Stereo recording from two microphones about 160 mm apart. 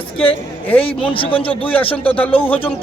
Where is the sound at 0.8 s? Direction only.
35° left (ahead or behind).